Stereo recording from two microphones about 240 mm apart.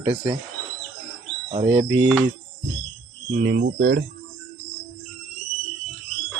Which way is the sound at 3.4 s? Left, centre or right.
Right.